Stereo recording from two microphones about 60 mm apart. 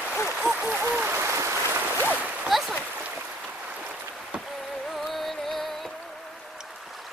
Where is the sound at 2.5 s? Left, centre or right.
Centre.